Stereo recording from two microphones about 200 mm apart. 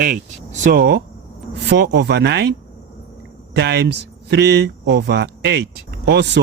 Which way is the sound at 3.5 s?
55° right (ahead or behind).